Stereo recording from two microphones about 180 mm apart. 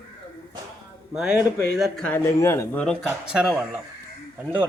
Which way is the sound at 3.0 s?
5° right (ahead or behind).